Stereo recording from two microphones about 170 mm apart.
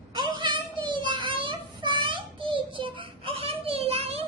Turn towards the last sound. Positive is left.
turn(degrees=-35)  # may be behind; listen again after turning